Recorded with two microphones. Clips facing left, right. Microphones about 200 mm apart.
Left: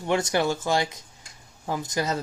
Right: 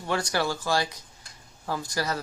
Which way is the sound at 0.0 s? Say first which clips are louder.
Left 4 dB; 20° left (ahead or behind).